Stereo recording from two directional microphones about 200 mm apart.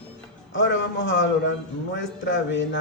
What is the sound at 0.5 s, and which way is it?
A man's voice, 65° left (ahead or behind).